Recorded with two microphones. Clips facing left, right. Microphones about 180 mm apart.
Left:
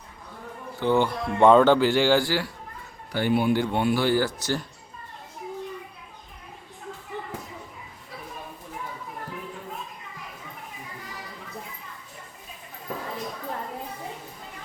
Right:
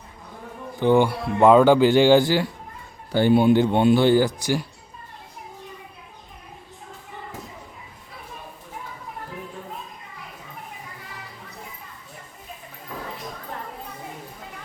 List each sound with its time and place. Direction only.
0.8 s speech: 15° right (ahead or behind)